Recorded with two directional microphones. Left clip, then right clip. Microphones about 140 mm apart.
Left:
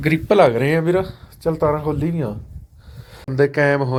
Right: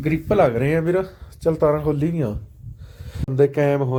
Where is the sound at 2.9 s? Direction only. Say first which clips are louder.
Right 2 dB; 40° right (ahead or behind).